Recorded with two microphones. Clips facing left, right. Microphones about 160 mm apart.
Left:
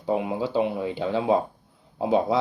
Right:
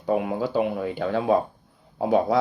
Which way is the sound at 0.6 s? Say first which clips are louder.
Even; 20° left (ahead or behind).